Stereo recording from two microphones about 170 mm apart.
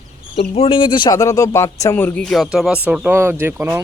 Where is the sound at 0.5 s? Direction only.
35° left (ahead or behind).